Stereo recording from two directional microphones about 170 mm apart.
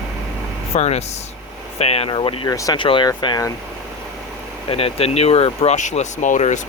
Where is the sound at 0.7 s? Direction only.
40° left (ahead or behind).